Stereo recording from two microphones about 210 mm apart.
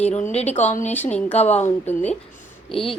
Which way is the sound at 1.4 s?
30° left (ahead or behind).